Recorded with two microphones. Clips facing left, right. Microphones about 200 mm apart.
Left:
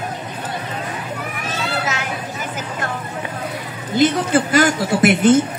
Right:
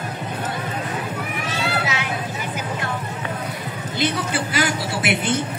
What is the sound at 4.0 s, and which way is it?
A man's voice, 45° left (ahead or behind).